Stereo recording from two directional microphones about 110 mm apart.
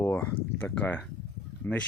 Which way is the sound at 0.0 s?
20° left (ahead or behind).